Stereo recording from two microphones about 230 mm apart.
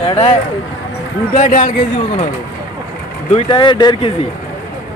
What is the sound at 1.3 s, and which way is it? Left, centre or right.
Speech, left.